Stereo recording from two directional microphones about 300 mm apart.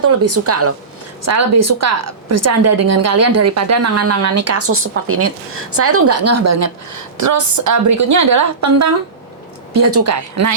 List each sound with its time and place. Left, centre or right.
0.0 s a woman's voice: right
7.2 s a woman's voice: right